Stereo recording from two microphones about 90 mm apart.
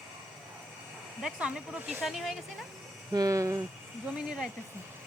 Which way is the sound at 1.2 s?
5° right (ahead or behind).